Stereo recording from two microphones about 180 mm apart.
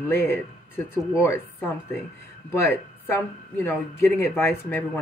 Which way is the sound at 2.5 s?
15° left (ahead or behind).